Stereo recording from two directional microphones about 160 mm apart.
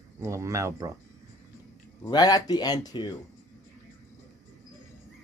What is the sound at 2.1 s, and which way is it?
Speech, 25° left (ahead or behind).